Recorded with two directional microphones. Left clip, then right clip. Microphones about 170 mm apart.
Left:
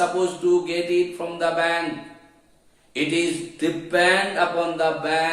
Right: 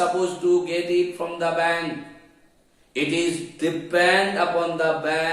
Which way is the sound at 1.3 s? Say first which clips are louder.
Left 1 dB; 25° left (ahead or behind).